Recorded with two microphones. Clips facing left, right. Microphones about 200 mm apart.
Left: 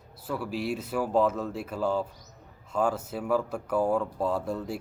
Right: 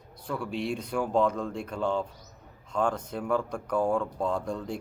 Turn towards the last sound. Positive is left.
turn(degrees=5)  # may be behind; listen again after turning